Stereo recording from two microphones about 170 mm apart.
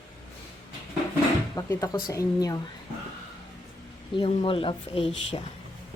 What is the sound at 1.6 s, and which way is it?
Speech, 20° left (ahead or behind).